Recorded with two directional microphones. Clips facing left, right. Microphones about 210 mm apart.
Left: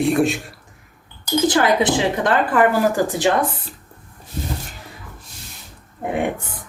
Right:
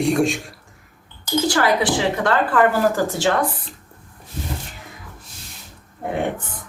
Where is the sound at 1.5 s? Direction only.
20° left (ahead or behind).